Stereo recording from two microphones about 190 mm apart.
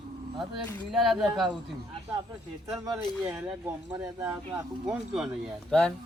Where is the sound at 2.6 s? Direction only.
20° right (ahead or behind).